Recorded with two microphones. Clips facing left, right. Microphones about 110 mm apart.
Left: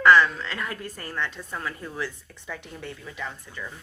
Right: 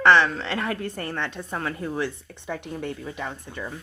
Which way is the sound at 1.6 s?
50° right (ahead or behind).